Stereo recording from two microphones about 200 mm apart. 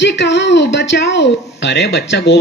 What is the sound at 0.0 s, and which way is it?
A woman's voice, 60° left (ahead or behind).